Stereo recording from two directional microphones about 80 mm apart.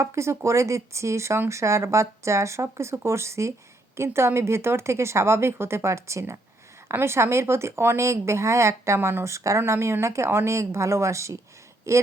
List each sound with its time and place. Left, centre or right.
0.0 s speech: right
9.2 s speech: right